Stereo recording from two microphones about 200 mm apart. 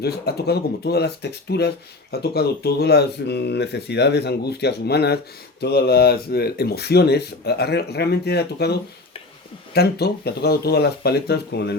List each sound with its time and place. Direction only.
0.0 s speech: 55° left (ahead or behind)